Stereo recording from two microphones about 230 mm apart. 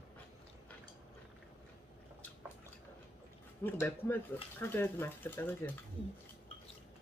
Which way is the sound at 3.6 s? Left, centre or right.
Centre.